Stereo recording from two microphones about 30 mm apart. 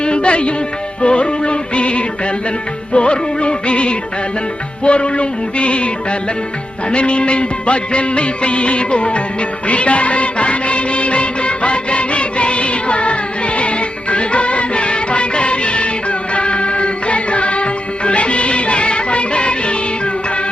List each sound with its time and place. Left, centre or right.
0.0 s music: left
6.9 s music: left
9.6 s music of bollywood: left
13.6 s music: left